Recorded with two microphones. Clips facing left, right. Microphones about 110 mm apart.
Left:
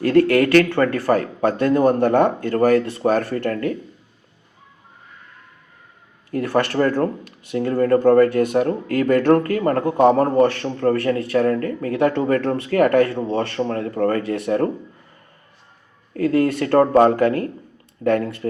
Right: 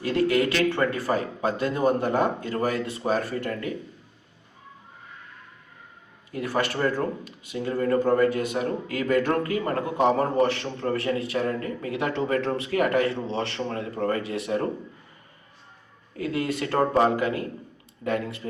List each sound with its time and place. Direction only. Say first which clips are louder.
0.0 s speech: left 7 dB; 60° left (ahead or behind)
6.3 s a man's voice: left 7 dB; 55° left (ahead or behind)
16.1 s a man's voice: left 9 dB; 50° left (ahead or behind)